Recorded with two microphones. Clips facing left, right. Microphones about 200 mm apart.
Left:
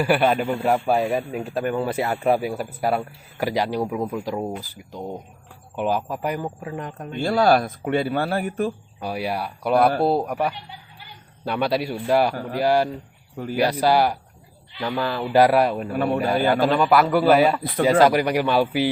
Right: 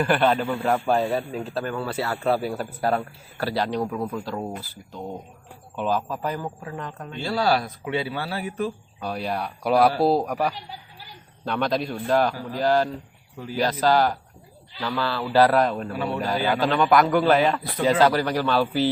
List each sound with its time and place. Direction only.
0.0 s speech: 10° left (ahead or behind)
7.2 s a man's voice: 50° left (ahead or behind)
9.0 s speech: 10° left (ahead or behind)
12.3 s a man's voice: 55° left (ahead or behind)
12.5 s speech: 10° left (ahead or behind)
15.9 s a man's voice: 55° left (ahead or behind)
16.7 s speech: 5° left (ahead or behind)